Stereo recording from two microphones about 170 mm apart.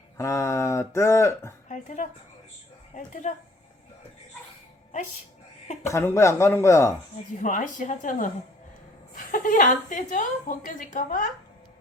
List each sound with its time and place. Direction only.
0.2 s speech: 20° left (ahead or behind)
1.6 s a woman's voice: 45° left (ahead or behind)
5.8 s speech: 15° left (ahead or behind)
7.3 s a woman's voice: 45° left (ahead or behind)